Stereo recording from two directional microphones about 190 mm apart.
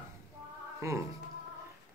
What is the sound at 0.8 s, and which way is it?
Speech, 15° right (ahead or behind).